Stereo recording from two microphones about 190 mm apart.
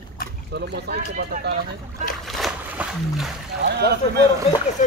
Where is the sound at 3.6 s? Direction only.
60° right (ahead or behind).